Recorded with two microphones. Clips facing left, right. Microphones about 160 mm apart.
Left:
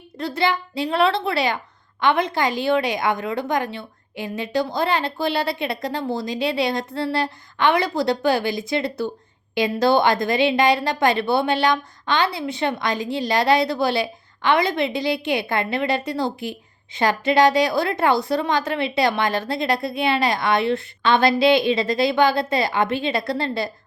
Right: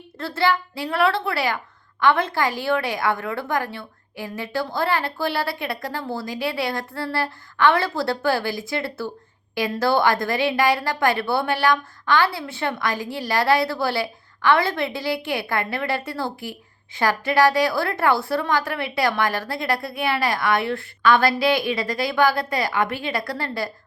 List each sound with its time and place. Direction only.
0.2 s a woman's voice: 15° left (ahead or behind)